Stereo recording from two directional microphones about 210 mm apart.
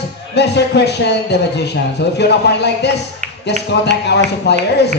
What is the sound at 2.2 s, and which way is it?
A man's voice, 55° left (ahead or behind).